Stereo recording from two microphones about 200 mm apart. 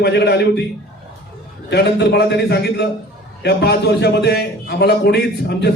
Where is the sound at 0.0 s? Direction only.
55° left (ahead or behind).